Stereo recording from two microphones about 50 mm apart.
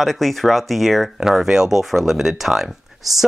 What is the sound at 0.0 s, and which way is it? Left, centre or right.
Speech, centre.